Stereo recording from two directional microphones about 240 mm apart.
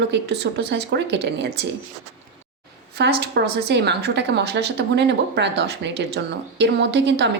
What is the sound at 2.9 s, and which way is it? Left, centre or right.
Speech, right.